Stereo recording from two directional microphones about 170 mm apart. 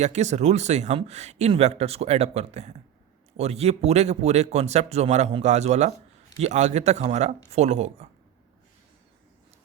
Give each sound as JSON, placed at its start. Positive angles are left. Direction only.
{"t": 0.0, "sound": "speech", "side_deg": -40}